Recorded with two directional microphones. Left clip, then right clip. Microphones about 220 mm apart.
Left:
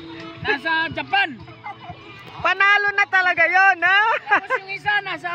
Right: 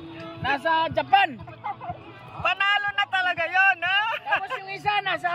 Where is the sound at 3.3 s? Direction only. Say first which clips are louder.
Left 4 dB; 25° left (ahead or behind).